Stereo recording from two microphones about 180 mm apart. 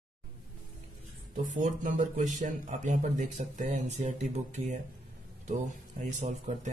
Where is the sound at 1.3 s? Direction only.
45° right (ahead or behind).